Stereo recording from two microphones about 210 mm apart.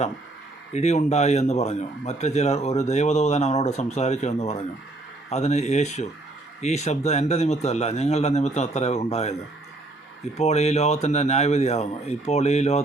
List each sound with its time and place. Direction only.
0.7 s a man's voice: 30° left (ahead or behind)
10.3 s a man's voice: 30° left (ahead or behind)